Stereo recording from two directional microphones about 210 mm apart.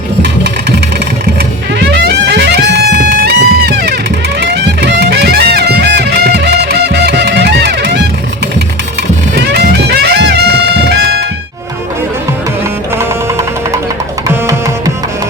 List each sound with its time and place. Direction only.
1.8 s music: 55° right (ahead or behind)
9.3 s music: 55° right (ahead or behind)